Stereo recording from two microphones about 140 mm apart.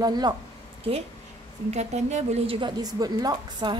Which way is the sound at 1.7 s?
55° right (ahead or behind).